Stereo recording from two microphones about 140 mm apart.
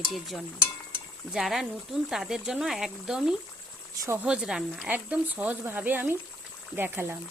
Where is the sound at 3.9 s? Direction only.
20° right (ahead or behind).